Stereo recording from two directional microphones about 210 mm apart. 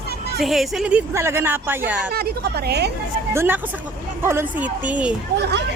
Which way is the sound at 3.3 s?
10° right (ahead or behind).